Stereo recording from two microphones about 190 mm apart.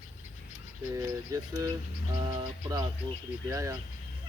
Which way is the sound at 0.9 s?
15° right (ahead or behind).